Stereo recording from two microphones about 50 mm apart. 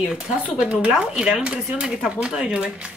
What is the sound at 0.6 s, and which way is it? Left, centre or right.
Speech, centre.